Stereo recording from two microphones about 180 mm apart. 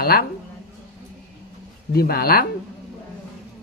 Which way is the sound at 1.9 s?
55° left (ahead or behind).